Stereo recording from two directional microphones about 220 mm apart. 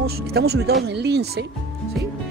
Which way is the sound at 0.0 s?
45° right (ahead or behind).